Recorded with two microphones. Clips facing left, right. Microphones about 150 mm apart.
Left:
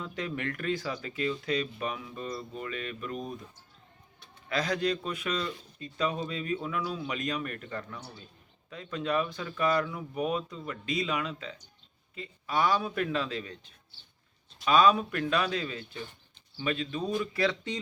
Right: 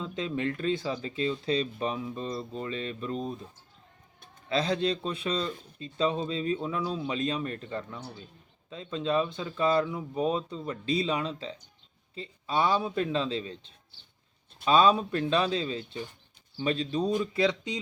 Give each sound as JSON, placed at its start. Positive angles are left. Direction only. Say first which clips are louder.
{"t": 0.0, "sound": "speech", "louder": "right 4 dB", "side_deg": -20}
{"t": 17.1, "sound": "speech", "louder": "right 1 dB", "side_deg": -20}